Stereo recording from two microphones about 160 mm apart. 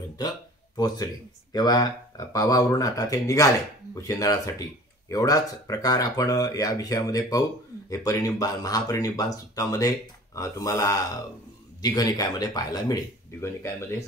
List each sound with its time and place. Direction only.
0.7 s speech: 25° left (ahead or behind)